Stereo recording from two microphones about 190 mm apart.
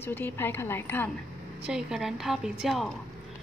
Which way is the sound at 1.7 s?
5° right (ahead or behind).